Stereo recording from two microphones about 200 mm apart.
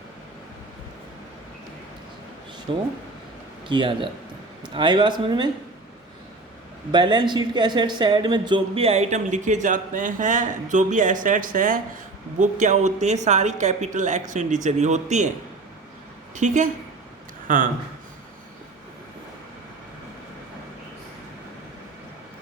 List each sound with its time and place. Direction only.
2.7 s speech: 25° right (ahead or behind)
6.9 s speech: 25° right (ahead or behind)
16.3 s speech: 35° right (ahead or behind)